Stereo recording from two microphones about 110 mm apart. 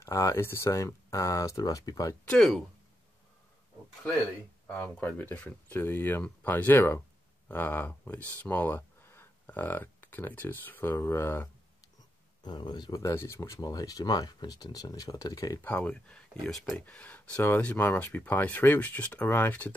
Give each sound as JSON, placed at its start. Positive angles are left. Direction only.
{"t": 0.0, "sound": "speech", "side_deg": 30}
{"t": 2.2, "sound": "speech", "side_deg": 5}
{"t": 4.6, "sound": "speech", "side_deg": 10}
{"t": 12.4, "sound": "speech", "side_deg": 40}
{"t": 15.6, "sound": "speech", "side_deg": 15}
{"t": 16.8, "sound": "speech", "side_deg": 15}